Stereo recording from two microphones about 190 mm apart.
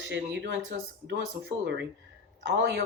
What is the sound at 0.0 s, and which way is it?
Speech, 70° right (ahead or behind).